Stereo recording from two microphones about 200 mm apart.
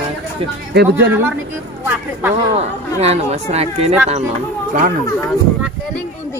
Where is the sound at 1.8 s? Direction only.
10° right (ahead or behind).